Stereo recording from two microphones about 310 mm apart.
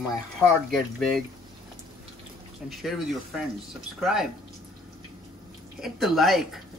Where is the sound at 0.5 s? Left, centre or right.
Centre.